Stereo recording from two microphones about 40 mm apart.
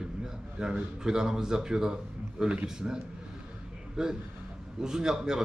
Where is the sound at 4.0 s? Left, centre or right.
Centre.